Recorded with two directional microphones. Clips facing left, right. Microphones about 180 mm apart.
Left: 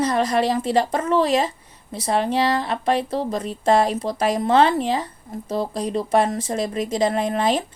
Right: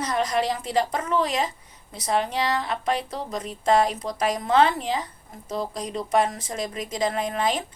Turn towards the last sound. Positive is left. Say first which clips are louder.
# left 5 dB
turn(degrees=30)  # may be behind; listen again after turning